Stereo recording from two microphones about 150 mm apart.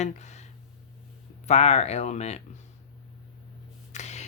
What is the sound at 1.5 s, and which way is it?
Speech, 45° left (ahead or behind).